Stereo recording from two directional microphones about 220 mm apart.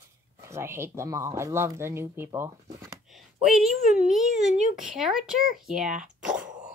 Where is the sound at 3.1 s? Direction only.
Centre (ahead or behind).